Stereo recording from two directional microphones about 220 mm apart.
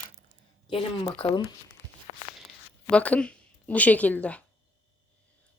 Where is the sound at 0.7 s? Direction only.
20° left (ahead or behind).